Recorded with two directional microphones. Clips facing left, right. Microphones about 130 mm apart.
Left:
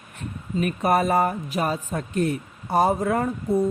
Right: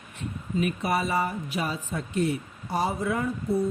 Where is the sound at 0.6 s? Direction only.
50° left (ahead or behind).